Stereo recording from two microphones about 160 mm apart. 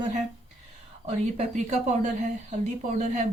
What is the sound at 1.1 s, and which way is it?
Speech, 45° right (ahead or behind).